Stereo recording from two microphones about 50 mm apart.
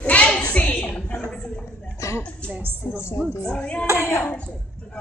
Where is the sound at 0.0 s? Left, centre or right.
Left.